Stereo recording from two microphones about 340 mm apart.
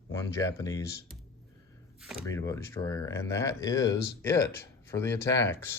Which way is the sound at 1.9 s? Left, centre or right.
Centre.